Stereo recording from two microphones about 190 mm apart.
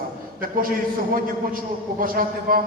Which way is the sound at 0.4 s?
50° right (ahead or behind).